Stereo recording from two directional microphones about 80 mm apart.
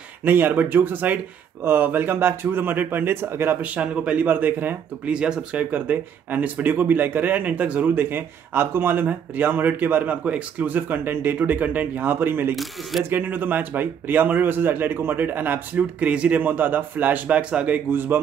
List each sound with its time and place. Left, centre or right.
0.2 s speech: right
5.1 s speech: centre
17.8 s speech: right